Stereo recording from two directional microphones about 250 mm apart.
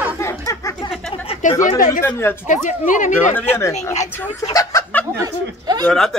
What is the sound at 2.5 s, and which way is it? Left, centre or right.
Speech, left.